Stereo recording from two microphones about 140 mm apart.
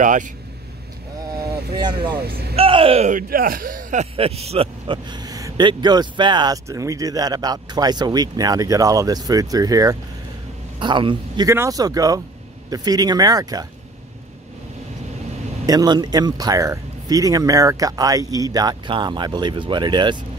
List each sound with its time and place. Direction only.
0.0 s speech: 65° right (ahead or behind)
1.8 s a man's voice: 30° right (ahead or behind)
3.1 s speech: 85° right
4.0 s a man's voice: 45° right (ahead or behind)
11.4 s speech: 20° right (ahead or behind)
15.6 s speech: 25° right (ahead or behind)